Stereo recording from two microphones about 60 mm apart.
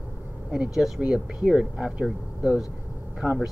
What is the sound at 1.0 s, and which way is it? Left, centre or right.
Speech, centre.